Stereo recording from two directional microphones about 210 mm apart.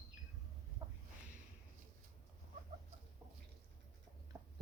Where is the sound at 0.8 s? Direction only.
20° right (ahead or behind).